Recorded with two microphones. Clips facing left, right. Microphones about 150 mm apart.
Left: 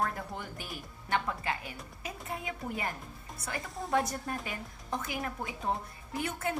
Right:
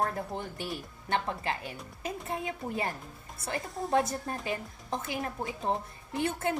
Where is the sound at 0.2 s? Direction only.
30° right (ahead or behind).